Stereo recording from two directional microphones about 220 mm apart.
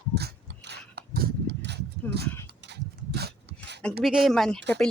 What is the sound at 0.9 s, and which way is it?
Horse, 45° right (ahead or behind).